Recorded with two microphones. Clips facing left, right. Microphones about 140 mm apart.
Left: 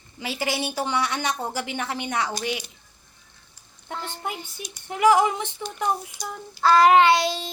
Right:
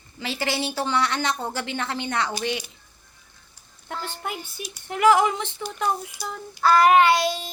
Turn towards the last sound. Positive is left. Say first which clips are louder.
# even
turn(degrees=25)  # may be behind; listen again after turning